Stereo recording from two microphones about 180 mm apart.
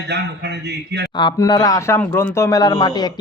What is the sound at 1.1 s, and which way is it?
A man's voice, 25° left (ahead or behind).